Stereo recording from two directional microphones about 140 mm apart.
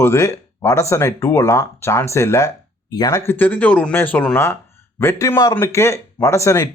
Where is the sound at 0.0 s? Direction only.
20° left (ahead or behind).